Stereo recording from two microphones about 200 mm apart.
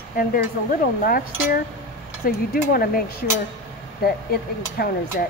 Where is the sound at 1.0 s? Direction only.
50° left (ahead or behind).